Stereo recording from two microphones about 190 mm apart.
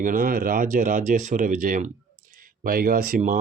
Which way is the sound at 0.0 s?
45° right (ahead or behind).